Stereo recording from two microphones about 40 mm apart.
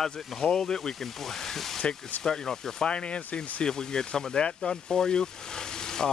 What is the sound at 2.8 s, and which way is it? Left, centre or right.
Speech, left.